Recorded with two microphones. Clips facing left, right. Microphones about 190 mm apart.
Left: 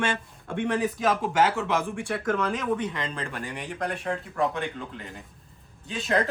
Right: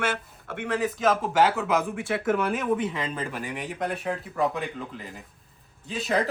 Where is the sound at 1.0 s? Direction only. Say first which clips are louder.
Right 3 dB; centre (ahead or behind).